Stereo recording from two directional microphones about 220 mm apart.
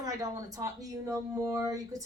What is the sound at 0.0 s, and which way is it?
Speech, 15° right (ahead or behind).